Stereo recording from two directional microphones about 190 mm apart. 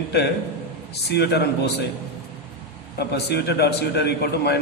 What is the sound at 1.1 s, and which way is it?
Speech, 60° left (ahead or behind).